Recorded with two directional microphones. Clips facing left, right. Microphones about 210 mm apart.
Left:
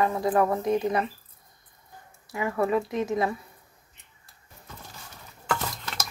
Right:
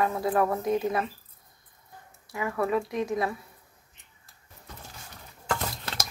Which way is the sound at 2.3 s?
Centre (ahead or behind).